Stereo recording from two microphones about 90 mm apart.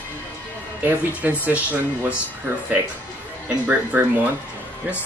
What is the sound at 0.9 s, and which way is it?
Speech, 20° right (ahead or behind).